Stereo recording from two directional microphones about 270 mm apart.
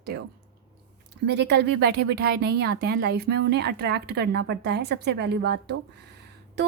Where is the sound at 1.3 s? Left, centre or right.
Right.